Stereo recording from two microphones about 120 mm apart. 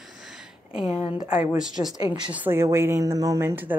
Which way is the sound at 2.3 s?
15° right (ahead or behind).